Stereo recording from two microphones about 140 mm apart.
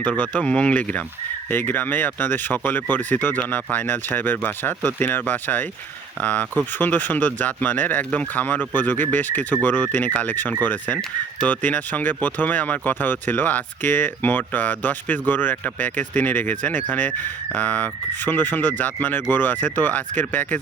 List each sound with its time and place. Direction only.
0.0 s speech: 10° left (ahead or behind)